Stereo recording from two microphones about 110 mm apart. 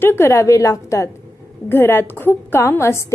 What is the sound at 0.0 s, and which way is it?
Speech, 20° left (ahead or behind).